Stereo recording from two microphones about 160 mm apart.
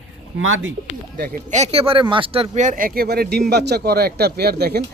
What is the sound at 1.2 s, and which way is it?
Speech, 45° right (ahead or behind).